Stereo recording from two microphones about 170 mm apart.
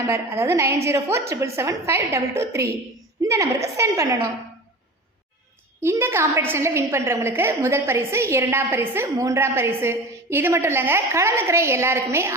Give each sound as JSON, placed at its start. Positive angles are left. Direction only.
{"t": 0.1, "sound": "a woman's voice", "side_deg": -15}
{"t": 5.8, "sound": "a woman's voice", "side_deg": -15}